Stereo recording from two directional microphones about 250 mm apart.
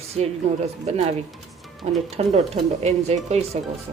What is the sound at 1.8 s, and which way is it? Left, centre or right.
Speech, right.